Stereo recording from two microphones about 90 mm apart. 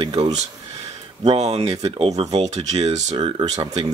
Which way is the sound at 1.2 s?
90° right.